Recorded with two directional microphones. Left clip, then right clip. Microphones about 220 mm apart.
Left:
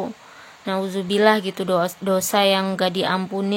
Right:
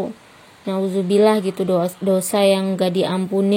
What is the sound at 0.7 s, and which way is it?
Speech, 20° left (ahead or behind).